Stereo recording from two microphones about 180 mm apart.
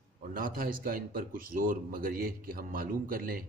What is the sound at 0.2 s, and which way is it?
A man's voice, 50° right (ahead or behind).